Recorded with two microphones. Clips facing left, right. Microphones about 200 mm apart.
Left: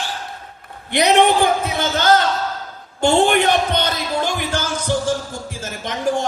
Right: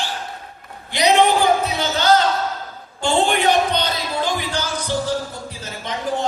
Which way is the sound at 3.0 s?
50° left (ahead or behind).